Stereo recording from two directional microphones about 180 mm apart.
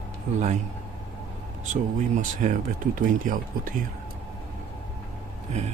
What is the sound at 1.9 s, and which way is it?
Speech, 45° right (ahead or behind).